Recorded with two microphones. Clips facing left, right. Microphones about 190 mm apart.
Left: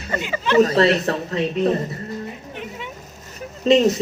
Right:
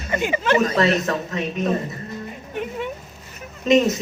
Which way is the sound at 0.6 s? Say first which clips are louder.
Left 4 dB; 35° left (ahead or behind).